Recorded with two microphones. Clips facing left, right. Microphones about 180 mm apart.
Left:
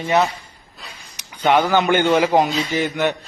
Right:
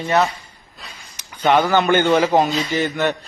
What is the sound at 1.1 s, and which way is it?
A man's voice, 15° left (ahead or behind).